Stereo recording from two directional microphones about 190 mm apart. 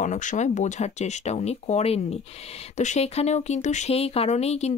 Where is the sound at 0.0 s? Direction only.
40° left (ahead or behind).